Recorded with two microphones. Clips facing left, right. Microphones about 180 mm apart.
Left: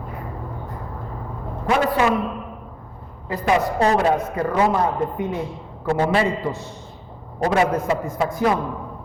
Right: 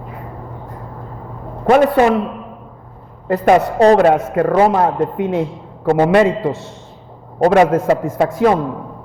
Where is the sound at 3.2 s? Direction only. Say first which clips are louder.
Right 8 dB; 60° right (ahead or behind).